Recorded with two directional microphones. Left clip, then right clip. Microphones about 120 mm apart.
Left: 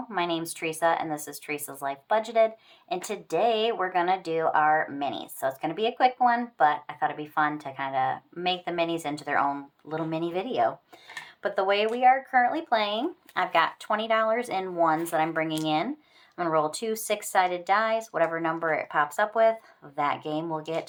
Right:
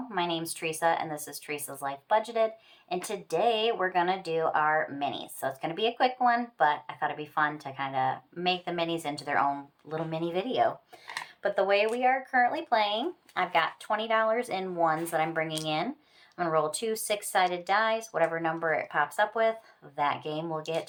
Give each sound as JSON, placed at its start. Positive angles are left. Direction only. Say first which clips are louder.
{"t": 0.1, "sound": "speech", "louder": "left 2 dB", "side_deg": 35}
{"t": 11.4, "sound": "speech", "louder": "left 1 dB", "side_deg": 40}